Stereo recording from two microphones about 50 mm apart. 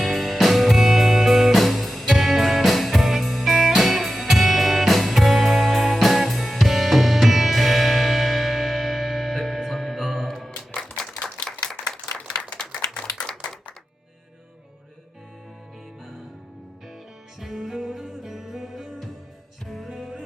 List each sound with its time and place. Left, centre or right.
0.0 s music: centre
11.2 s clapping: centre
17.4 s music: centre